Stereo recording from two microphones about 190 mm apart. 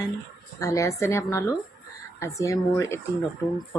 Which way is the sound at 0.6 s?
15° left (ahead or behind).